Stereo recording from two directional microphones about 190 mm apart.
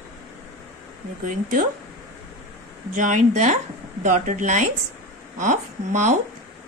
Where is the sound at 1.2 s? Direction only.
45° right (ahead or behind).